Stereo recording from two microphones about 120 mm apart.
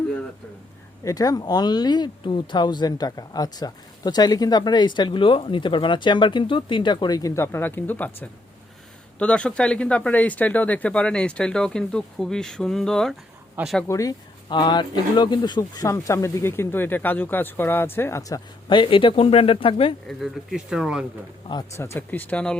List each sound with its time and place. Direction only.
1.0 s speech: 30° left (ahead or behind); by 13.1 s 5° left (ahead or behind)
13.8 s speech: 30° left (ahead or behind)
18.7 s speech: 45° left (ahead or behind)
20.1 s speech: centre (ahead or behind)
21.8 s speech: 20° left (ahead or behind)